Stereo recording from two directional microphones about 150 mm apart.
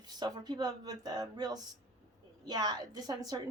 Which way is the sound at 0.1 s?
25° right (ahead or behind).